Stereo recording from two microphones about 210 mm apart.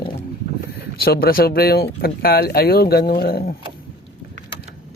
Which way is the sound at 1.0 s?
45° left (ahead or behind).